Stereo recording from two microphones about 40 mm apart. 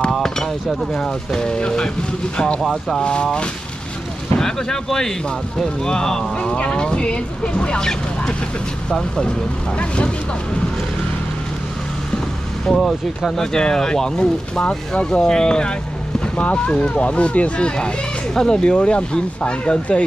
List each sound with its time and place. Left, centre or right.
0.9 s speech: centre
2.6 s speech: centre
3.0 s speech: left
4.4 s speech: centre
9.8 s speech: left
12.7 s speech: centre
13.4 s speech: centre
16.3 s speech: left
18.3 s speech: centre
18.6 s speech: left